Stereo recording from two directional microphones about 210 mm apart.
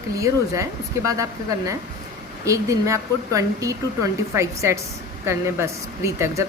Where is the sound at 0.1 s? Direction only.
15° right (ahead or behind).